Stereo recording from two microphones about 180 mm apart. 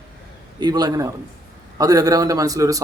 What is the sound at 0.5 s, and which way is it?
Speech, 20° right (ahead or behind).